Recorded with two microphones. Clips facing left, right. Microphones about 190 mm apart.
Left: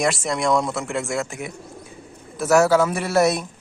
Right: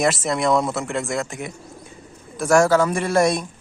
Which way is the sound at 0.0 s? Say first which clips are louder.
Right 2 dB; centre (ahead or behind).